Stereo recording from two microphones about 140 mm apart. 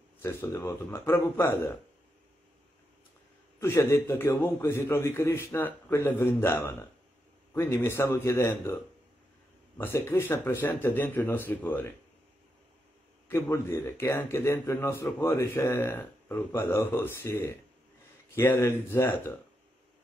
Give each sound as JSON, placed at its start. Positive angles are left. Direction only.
{"t": 0.2, "sound": "a man's voice", "side_deg": 15}
{"t": 3.5, "sound": "a man's voice", "side_deg": 20}
{"t": 9.8, "sound": "a man's voice", "side_deg": 15}
{"t": 13.3, "sound": "a man's voice", "side_deg": 20}